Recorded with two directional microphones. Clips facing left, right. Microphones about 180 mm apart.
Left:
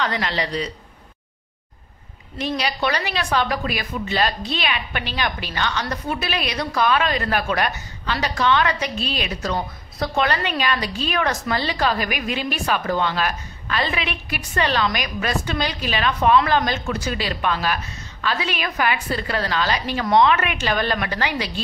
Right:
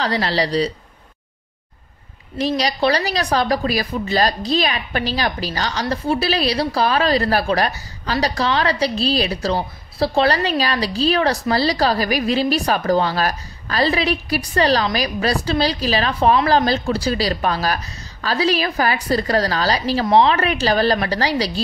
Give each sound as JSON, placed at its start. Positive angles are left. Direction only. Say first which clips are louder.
{"t": 0.0, "sound": "a woman's voice", "louder": "right 4 dB", "side_deg": -35}
{"t": 2.3, "sound": "a woman's voice", "louder": "right 4 dB", "side_deg": -35}